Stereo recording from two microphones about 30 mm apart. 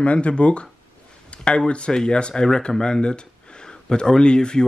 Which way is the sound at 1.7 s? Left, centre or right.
Left.